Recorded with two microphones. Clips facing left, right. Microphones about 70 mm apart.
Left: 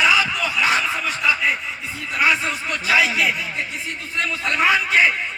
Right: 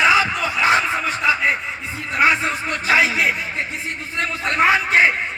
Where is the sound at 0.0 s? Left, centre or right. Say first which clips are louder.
Right 2 dB; right.